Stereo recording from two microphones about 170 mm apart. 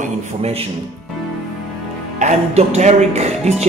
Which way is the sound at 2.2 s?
40° right (ahead or behind).